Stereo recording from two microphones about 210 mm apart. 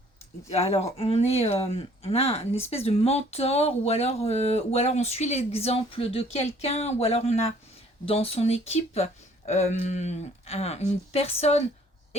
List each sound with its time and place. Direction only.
0.5 s speech: 30° left (ahead or behind)